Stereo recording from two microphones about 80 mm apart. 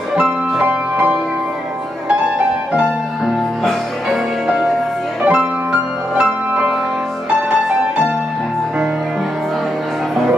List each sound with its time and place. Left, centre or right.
0.1 s music: centre
0.7 s music: right
5.2 s music: centre